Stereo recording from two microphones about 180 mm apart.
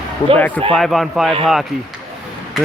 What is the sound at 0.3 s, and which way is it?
Speech, 10° left (ahead or behind).